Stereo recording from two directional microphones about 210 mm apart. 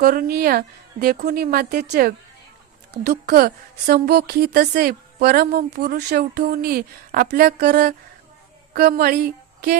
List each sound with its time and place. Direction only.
0.0 s a woman's voice: 45° right (ahead or behind)
3.2 s a woman's voice: 45° right (ahead or behind)